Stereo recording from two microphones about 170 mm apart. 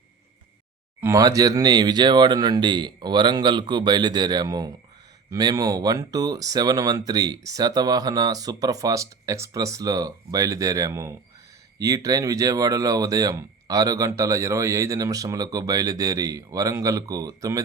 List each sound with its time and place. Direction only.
1.0 s speech: 20° right (ahead or behind)